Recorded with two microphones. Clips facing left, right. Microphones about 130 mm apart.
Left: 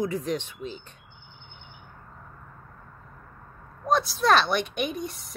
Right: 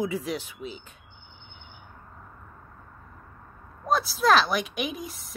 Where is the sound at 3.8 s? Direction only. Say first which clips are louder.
Even; centre (ahead or behind).